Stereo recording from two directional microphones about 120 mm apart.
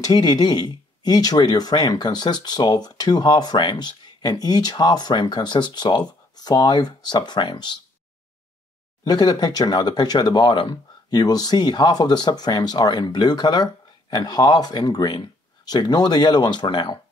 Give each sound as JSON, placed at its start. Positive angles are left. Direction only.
{"t": 0.0, "sound": "speech", "side_deg": 35}
{"t": 9.0, "sound": "speech", "side_deg": 35}